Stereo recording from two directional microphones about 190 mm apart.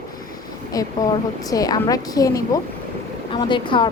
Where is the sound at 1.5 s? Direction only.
20° left (ahead or behind).